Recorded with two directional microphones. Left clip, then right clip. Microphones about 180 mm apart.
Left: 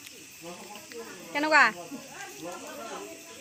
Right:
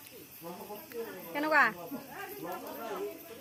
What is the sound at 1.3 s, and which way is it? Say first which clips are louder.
Speech: left 5 dB; 40° left (ahead or behind).